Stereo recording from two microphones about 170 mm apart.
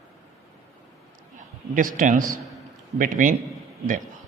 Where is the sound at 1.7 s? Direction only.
50° right (ahead or behind).